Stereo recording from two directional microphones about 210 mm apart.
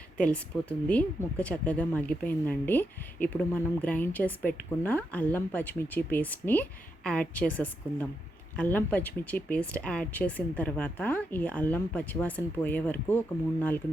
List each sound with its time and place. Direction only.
0.2 s speech: 5° left (ahead or behind)